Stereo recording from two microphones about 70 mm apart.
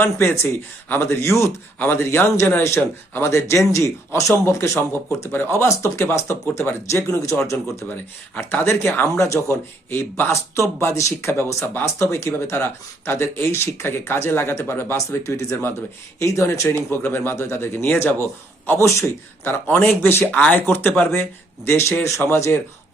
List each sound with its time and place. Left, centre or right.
0.0 s speech: left
1.8 s speech: left
8.4 s speech: left
10.3 s speech: left
20.3 s speech: left